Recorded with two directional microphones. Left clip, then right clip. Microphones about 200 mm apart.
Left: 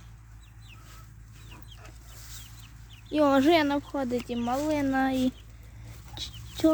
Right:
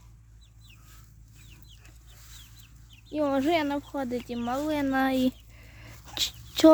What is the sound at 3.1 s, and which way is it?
Speech, 10° left (ahead or behind).